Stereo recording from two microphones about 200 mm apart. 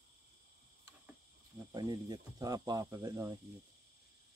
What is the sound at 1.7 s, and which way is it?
Speech, 20° right (ahead or behind).